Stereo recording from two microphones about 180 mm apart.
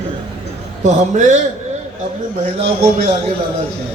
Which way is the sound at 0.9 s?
40° right (ahead or behind).